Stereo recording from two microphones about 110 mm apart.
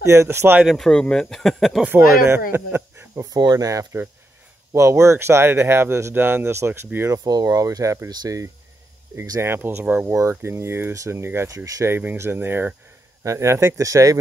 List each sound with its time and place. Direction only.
0.0 s speech: 25° right (ahead or behind)
0.7 s speech: 5° left (ahead or behind)
1.9 s speech: 20° right (ahead or behind)
3.3 s speech: 35° right (ahead or behind)
7.2 s speech: 35° right (ahead or behind); by 12.7 s 20° right (ahead or behind)
13.2 s speech: 30° right (ahead or behind)